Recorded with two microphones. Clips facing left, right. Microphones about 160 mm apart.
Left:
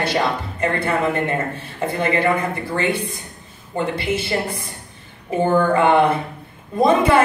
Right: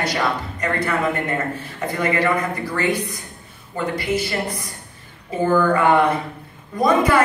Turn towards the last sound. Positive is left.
turn(degrees=25)  # may be behind; listen again after turning